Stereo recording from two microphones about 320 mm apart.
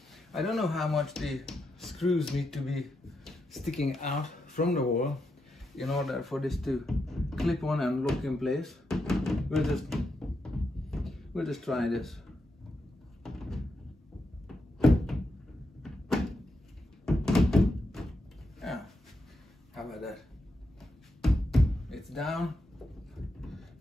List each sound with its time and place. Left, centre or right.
0.3 s speech: centre
4.6 s speech: left
5.8 s speech: centre
13.2 s door: centre
14.8 s thunk: centre
15.8 s door: centre
17.0 s thunk: centre
18.6 s a sound: centre
20.8 s knock: centre
23.1 s a sound: centre